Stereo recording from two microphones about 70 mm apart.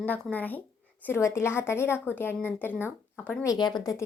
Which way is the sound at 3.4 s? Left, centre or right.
Left.